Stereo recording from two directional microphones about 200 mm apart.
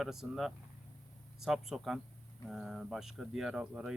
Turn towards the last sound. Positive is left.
turn(degrees=-5)  # may be behind; listen again after turning